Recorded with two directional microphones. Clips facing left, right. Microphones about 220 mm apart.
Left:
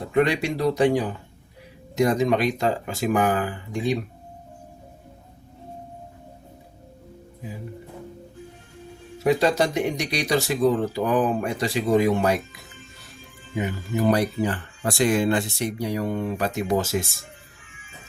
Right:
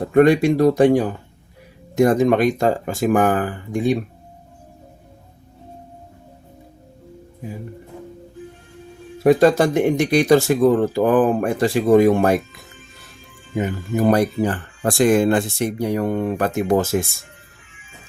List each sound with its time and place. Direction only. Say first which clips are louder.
0.1 s speech: right 8 dB; 50° right (ahead or behind)
9.2 s speech: right 7 dB; 50° right (ahead or behind)
13.5 s speech: right 4 dB; 45° right (ahead or behind)